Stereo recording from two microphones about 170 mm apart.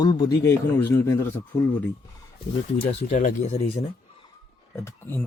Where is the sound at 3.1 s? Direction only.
45° left (ahead or behind).